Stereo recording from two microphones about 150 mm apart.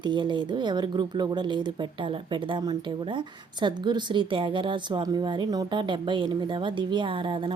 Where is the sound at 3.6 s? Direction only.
30° right (ahead or behind).